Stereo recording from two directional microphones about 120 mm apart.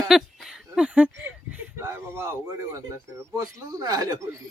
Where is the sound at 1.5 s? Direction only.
20° right (ahead or behind).